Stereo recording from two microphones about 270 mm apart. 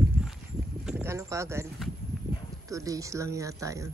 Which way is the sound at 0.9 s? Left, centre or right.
Centre.